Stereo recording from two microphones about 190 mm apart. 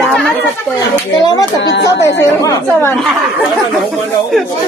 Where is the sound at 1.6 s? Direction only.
65° left (ahead or behind).